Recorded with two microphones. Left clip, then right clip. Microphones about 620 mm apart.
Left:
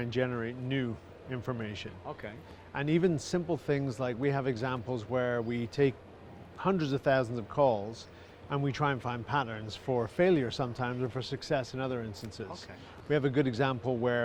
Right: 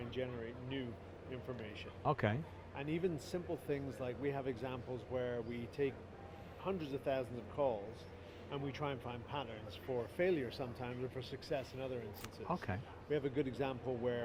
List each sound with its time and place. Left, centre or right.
0.0 s speech: left
2.0 s speech: right
2.7 s speech: left
13.1 s speech: left